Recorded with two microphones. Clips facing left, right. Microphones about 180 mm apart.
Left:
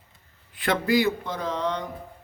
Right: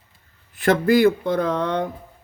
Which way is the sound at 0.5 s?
45° right (ahead or behind).